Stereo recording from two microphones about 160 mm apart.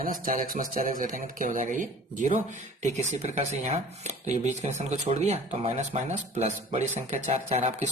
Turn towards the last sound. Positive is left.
turn(degrees=-40)  # may be behind; listen again after turning